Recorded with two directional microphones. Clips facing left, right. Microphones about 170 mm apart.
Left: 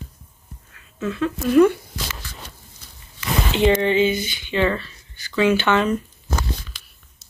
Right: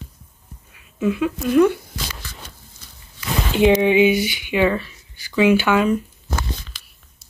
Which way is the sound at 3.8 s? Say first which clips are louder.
Right 4 dB; 15° right (ahead or behind).